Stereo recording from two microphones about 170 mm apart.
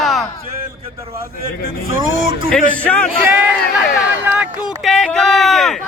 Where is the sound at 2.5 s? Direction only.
10° left (ahead or behind).